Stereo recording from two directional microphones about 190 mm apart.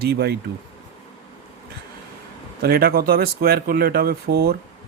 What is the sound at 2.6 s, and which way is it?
Speech, 50° right (ahead or behind).